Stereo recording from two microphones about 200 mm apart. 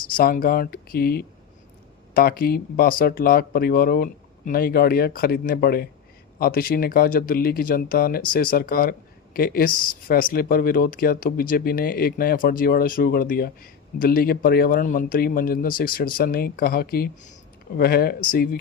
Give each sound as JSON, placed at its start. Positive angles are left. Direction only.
{"t": 0.1, "sound": "speech", "side_deg": 45}